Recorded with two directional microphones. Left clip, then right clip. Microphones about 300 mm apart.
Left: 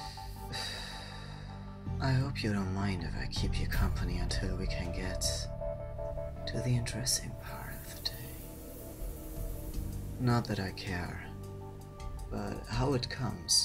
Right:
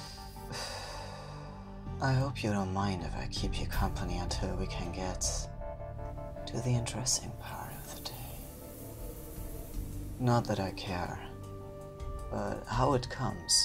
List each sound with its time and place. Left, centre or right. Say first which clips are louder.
0.5 s music: left 1 dB; centre
2.0 s music: right 3 dB; centre
2.3 s speech: right 3 dB; centre
10.2 s speech: right 3 dB; centre
12.4 s speech: right 5 dB; centre
12.9 s speech: right 2 dB; right